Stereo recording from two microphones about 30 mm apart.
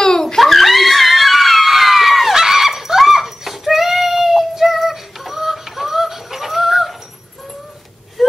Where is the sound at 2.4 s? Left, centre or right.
Centre.